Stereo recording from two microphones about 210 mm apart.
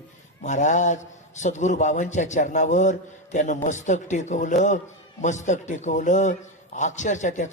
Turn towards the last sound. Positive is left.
turn(degrees=35)  # may be behind; listen again after turning